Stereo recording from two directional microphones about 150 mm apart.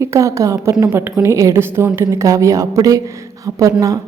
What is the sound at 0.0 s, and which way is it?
A woman's voice, 20° right (ahead or behind).